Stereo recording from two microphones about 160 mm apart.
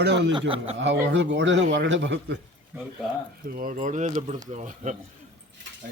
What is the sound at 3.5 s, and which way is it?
Speech, 60° right (ahead or behind).